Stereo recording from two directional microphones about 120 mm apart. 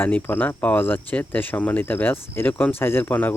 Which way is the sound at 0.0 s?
15° left (ahead or behind).